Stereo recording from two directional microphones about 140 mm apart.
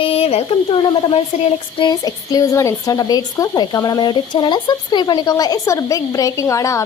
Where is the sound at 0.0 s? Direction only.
45° left (ahead or behind).